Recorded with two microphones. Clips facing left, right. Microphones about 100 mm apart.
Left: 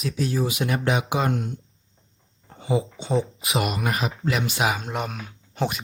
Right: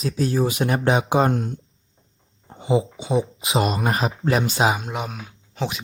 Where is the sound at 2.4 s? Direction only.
25° right (ahead or behind).